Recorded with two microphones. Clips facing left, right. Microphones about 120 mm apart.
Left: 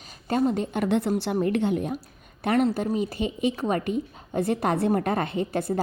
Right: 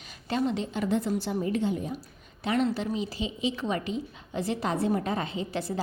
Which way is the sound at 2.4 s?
50° left (ahead or behind).